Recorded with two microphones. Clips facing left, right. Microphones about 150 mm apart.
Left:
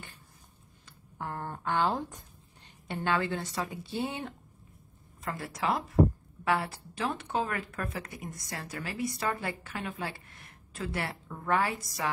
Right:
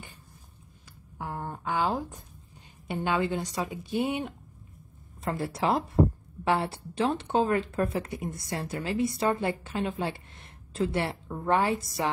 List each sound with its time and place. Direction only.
1.1 s a woman's voice: 5° right (ahead or behind)
5.2 s speech: 30° right (ahead or behind)